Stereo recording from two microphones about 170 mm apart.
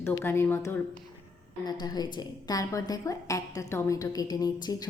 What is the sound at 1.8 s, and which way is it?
A woman's voice, 25° left (ahead or behind).